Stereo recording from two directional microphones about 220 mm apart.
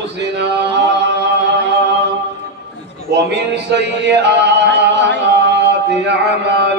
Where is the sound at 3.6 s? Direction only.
50° right (ahead or behind).